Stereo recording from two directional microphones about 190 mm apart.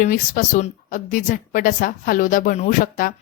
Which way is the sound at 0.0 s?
45° left (ahead or behind).